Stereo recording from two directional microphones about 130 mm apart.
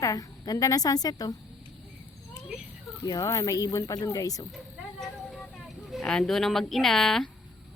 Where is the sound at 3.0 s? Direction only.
25° left (ahead or behind).